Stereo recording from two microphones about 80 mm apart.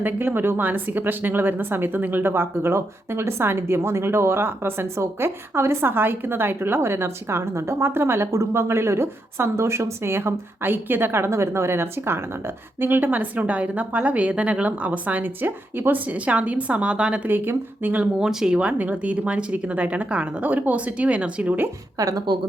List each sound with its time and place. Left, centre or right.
0.0 s speech: right
17.2 s speech: right
21.9 s speech: right